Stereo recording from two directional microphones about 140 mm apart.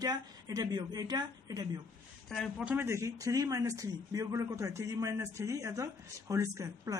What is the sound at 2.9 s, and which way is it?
A man's voice, 20° right (ahead or behind).